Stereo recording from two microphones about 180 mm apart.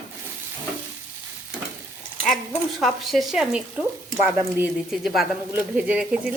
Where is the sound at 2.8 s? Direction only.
Centre (ahead or behind).